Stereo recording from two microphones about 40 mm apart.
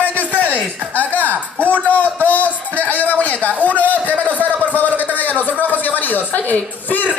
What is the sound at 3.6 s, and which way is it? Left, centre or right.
Speech, left.